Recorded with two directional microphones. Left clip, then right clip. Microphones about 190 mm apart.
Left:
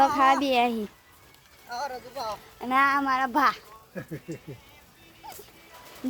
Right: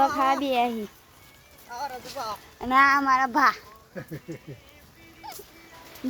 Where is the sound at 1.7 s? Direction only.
60° left (ahead or behind).